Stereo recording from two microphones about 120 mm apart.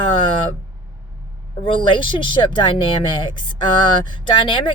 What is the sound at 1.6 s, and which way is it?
Speech, 45° left (ahead or behind).